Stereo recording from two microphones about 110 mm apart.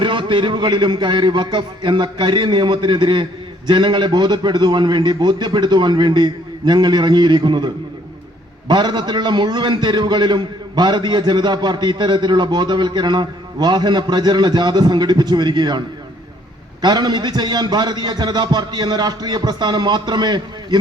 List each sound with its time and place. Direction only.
0.0 s a man's voice: 45° right (ahead or behind)
16.8 s a man's voice: 40° right (ahead or behind)